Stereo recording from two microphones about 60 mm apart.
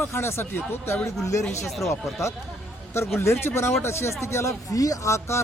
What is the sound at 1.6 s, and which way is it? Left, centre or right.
Speech, centre.